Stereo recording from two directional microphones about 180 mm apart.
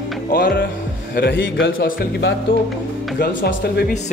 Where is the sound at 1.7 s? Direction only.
50° left (ahead or behind).